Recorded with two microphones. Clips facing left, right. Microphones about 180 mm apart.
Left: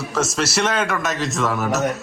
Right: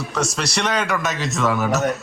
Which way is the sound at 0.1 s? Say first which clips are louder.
Left 3 dB; centre (ahead or behind).